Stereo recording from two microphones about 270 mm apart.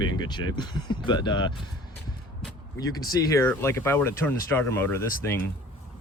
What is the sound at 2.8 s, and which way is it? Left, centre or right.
Speech, centre.